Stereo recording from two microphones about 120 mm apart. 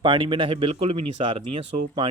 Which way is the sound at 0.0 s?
40° right (ahead or behind).